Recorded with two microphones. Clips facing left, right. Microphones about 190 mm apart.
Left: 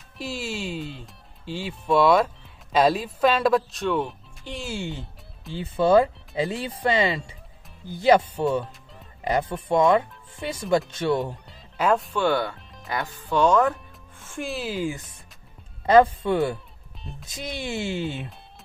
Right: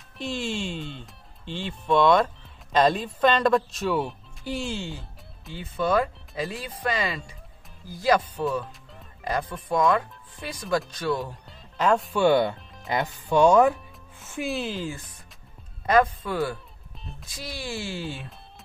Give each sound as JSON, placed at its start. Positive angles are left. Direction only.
{"t": 0.2, "sound": "speech", "side_deg": 5}
{"t": 4.7, "sound": "speech", "side_deg": 20}
{"t": 5.5, "sound": "speech", "side_deg": 30}
{"t": 11.4, "sound": "music", "side_deg": 5}
{"t": 12.1, "sound": "speech", "side_deg": -15}
{"t": 14.3, "sound": "speech", "side_deg": 0}
{"t": 14.8, "sound": "speech", "side_deg": 20}
{"t": 15.8, "sound": "speech", "side_deg": 30}
{"t": 16.9, "sound": "music", "side_deg": 0}
{"t": 17.3, "sound": "speech", "side_deg": 20}